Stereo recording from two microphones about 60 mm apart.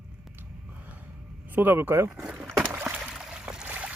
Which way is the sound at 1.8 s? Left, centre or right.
Right.